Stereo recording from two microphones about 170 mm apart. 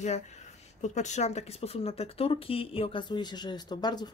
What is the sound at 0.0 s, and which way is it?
Speech, 40° left (ahead or behind).